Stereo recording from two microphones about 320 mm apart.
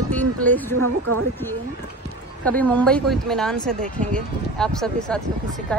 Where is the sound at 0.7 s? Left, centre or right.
Right.